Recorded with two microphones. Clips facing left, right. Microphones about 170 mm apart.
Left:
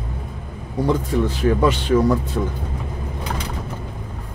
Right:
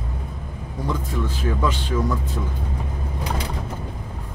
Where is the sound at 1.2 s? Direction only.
70° left (ahead or behind).